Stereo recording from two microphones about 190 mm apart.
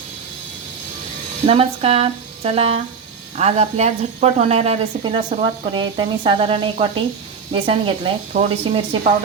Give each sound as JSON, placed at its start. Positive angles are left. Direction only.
{"t": 1.5, "sound": "a woman's voice", "side_deg": -30}